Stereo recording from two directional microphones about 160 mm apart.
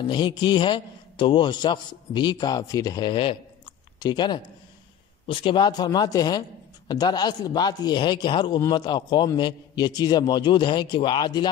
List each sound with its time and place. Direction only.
0.0 s a man's voice: 30° left (ahead or behind)